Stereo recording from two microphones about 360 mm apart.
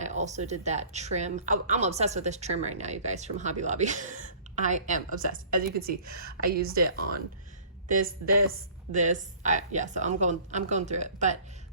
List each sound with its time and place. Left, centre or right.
0.0 s a woman's voice: centre
8.9 s a woman's voice: centre